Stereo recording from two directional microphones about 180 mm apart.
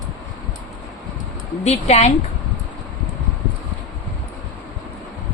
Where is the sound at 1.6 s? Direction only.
35° left (ahead or behind).